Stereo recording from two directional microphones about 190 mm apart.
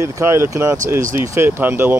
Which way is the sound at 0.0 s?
15° right (ahead or behind).